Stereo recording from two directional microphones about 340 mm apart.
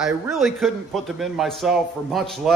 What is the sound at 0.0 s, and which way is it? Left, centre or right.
A man's voice, centre.